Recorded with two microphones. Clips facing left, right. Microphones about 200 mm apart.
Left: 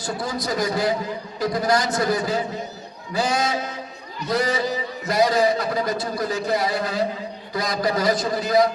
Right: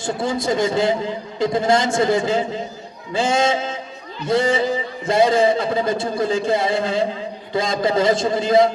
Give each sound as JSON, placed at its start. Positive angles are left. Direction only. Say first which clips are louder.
{"t": 0.0, "sound": "a man's voice", "louder": "right 5 dB", "side_deg": -25}